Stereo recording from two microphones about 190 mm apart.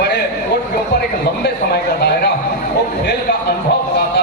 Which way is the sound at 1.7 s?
60° left (ahead or behind).